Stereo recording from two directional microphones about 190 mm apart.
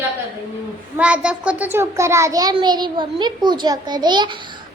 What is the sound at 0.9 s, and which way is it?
A child's voice, 5° right (ahead or behind).